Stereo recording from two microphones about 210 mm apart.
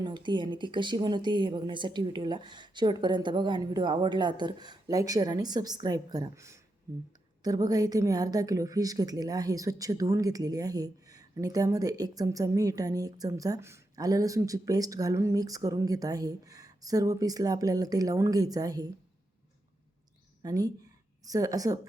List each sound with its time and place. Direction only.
0.0 s a woman's voice: 20° right (ahead or behind)
20.4 s a woman's voice: 15° right (ahead or behind)